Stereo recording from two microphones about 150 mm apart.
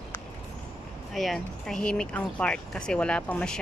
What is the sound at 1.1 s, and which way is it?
Speech, centre (ahead or behind).